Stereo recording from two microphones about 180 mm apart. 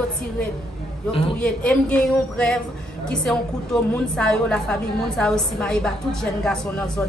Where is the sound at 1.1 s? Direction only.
30° left (ahead or behind).